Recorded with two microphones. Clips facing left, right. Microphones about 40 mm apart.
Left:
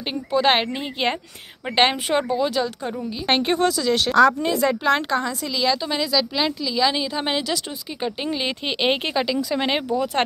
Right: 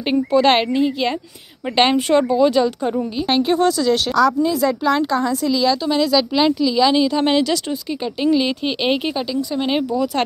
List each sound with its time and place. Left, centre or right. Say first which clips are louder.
0.3 s a woman's voice: right 3 dB; centre
0.7 s a woman's voice: right 6 dB; left
1.8 s a woman's voice: right 4 dB; centre
2.4 s speech: right 7 dB; centre
3.3 s speech: right 2 dB; left
3.5 s a woman's voice: right 4 dB; centre
4.1 s a woman's voice: even; left
5.2 s a woman's voice: right 6 dB; centre
6.1 s speech: right 5 dB; centre
6.9 s a woman's voice: right 8 dB; centre
8.0 s a woman's voice: right 7 dB; left
8.5 s speech: right 3 dB; left
9.1 s speech: even; left
9.7 s speech: right 3 dB; left